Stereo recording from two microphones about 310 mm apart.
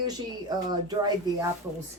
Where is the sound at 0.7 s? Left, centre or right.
Centre.